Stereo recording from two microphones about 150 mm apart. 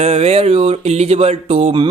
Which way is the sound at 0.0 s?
45° right (ahead or behind).